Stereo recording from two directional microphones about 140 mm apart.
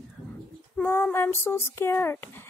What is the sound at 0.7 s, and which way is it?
Speech, 10° left (ahead or behind).